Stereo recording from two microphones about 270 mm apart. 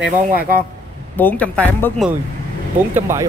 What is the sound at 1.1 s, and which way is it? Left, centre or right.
Speech, centre.